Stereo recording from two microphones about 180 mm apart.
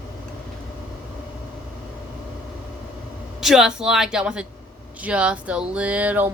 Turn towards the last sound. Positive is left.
turn(degrees=-10)  # may be behind; listen again after turning